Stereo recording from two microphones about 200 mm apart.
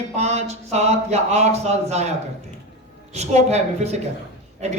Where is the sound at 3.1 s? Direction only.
35° right (ahead or behind).